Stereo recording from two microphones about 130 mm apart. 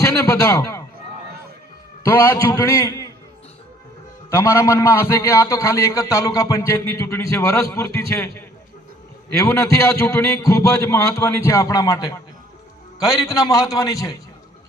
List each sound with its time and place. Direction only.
0.0 s a man's voice: 25° left (ahead or behind)
2.0 s a man's voice: 20° left (ahead or behind)
4.3 s a man's voice: 20° left (ahead or behind)